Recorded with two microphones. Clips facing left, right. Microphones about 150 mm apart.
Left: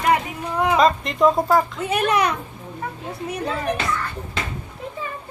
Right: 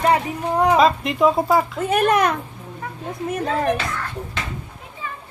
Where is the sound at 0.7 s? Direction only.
5° right (ahead or behind).